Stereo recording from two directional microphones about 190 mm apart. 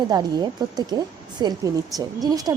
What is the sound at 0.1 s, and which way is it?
Speech, 20° right (ahead or behind).